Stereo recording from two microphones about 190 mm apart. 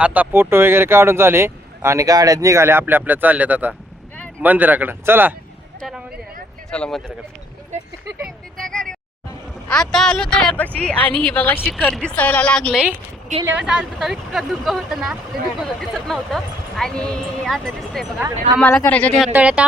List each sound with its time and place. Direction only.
0.0 s speech: 10° right (ahead or behind)
6.7 s speech: 5° left (ahead or behind)
8.7 s vehicle: 5° left (ahead or behind)
9.6 s a woman's voice: 5° left (ahead or behind)
10.9 s a woman's voice: 25° right (ahead or behind)
11.6 s speech: centre (ahead or behind)
12.1 s a woman's voice: 5° left (ahead or behind)
18.6 s a woman's voice: 10° left (ahead or behind)
19.3 s speech: 5° right (ahead or behind)